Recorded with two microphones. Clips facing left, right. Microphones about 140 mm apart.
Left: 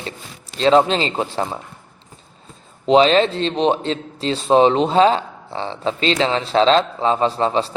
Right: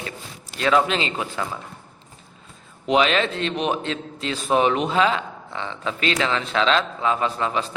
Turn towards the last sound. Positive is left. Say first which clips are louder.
# left 6 dB
turn(degrees=30)  # may be behind; listen again after turning